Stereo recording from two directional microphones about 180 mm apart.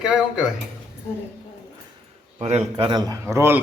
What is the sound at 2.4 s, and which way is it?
A man's voice, 40° right (ahead or behind).